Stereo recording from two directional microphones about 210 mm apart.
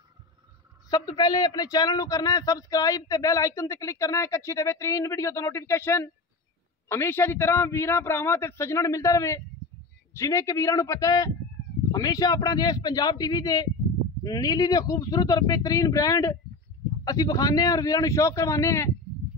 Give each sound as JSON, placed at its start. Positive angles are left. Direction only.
{"t": 0.8, "sound": "a man's voice", "side_deg": 20}